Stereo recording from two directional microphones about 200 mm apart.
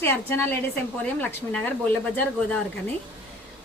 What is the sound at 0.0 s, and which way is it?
A woman's voice, 10° left (ahead or behind).